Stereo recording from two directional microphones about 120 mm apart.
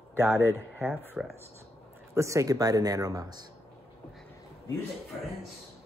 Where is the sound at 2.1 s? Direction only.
25° right (ahead or behind).